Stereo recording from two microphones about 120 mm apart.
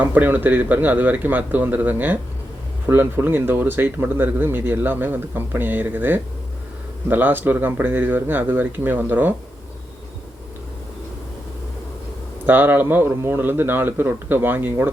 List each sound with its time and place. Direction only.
0.0 s speech: 15° right (ahead or behind)
12.5 s speech: 15° right (ahead or behind)